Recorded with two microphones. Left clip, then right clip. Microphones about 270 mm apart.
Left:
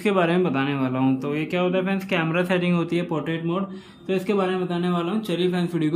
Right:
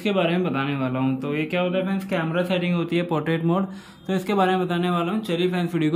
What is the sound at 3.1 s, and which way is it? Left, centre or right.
Speech, centre.